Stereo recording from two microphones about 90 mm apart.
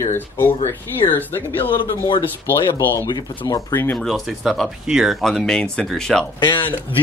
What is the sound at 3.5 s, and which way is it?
Speech, 40° left (ahead or behind).